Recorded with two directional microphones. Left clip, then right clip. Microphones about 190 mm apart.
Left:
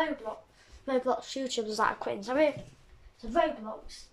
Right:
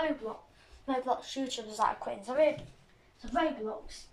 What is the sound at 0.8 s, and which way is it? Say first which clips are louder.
A woman's voice: left 3 dB; 50° left (ahead or behind).